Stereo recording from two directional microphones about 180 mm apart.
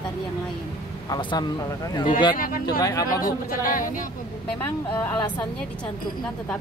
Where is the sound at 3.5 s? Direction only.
50° left (ahead or behind).